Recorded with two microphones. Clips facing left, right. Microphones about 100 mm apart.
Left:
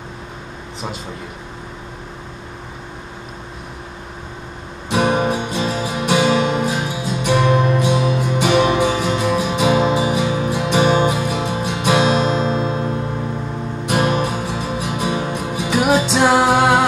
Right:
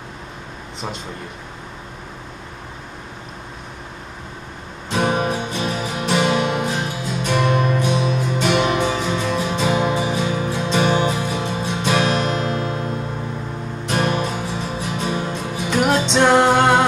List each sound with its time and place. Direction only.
4.8 s music: 15° left (ahead or behind)